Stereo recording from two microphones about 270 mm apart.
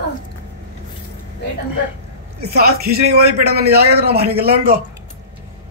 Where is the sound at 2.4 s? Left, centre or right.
Right.